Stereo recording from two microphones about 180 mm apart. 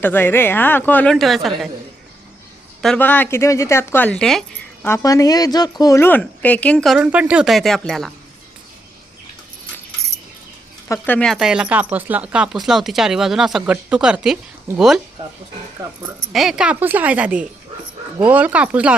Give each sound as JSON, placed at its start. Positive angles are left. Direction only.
{"t": 0.0, "sound": "a woman's voice", "side_deg": 10}
{"t": 2.8, "sound": "a woman's voice", "side_deg": 5}
{"t": 4.9, "sound": "a woman's voice", "side_deg": 20}
{"t": 10.8, "sound": "speech", "side_deg": 15}
{"t": 16.3, "sound": "a woman's voice", "side_deg": 0}